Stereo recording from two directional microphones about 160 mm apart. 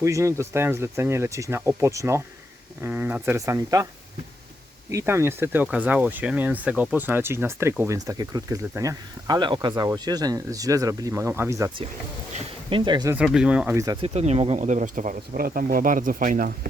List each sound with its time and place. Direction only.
0.0 s speech: 20° right (ahead or behind)
4.9 s speech: 20° right (ahead or behind)
12.3 s speech: 30° right (ahead or behind)
13.1 s speech: 5° right (ahead or behind)
13.7 s speech: 25° right (ahead or behind)
14.0 s speech: 40° right (ahead or behind)